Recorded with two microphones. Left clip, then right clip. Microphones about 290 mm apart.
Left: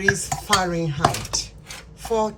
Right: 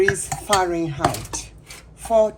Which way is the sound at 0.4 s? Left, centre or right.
Right.